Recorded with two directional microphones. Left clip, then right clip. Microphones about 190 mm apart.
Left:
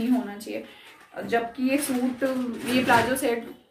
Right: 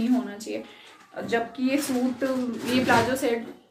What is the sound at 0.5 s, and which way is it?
A woman's voice, 5° right (ahead or behind).